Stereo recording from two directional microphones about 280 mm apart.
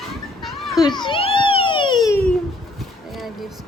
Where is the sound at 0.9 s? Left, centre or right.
Centre.